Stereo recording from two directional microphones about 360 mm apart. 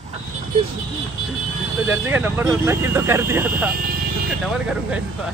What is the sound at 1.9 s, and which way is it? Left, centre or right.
Speech, centre.